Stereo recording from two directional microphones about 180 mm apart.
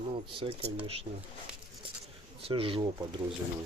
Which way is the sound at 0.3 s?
30° right (ahead or behind).